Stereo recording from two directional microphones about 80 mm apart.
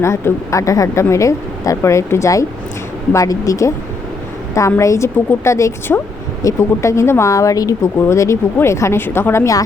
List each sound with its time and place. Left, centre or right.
0.0 s speech: left
7.9 s speech: left